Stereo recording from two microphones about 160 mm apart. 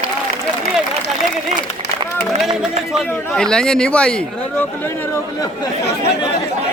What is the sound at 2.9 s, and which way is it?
A man's voice, 5° left (ahead or behind).